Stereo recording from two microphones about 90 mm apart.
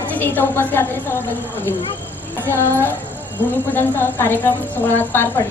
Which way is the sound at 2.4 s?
25° left (ahead or behind).